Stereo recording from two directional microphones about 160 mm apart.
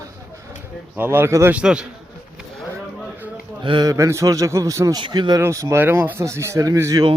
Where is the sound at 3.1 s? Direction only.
10° right (ahead or behind).